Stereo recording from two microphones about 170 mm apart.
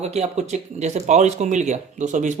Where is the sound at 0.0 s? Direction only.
40° right (ahead or behind).